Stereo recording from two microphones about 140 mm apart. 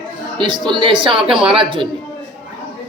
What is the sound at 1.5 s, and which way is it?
Speech, 40° right (ahead or behind).